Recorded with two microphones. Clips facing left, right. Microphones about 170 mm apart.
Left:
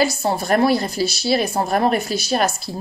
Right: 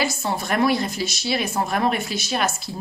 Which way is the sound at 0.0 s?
35° left (ahead or behind).